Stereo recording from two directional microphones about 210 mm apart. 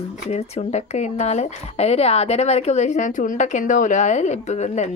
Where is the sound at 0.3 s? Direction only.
30° left (ahead or behind).